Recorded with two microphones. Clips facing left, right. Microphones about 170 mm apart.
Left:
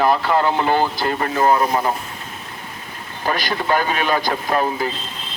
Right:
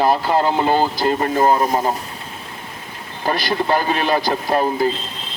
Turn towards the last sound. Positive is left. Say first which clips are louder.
# right 3 dB
turn(degrees=-35)  # may be behind; listen again after turning